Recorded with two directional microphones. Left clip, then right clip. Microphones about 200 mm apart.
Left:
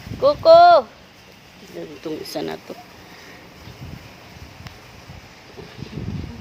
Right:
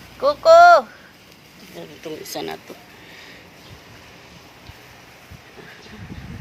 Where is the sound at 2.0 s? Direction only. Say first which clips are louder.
Left 2 dB; 20° left (ahead or behind).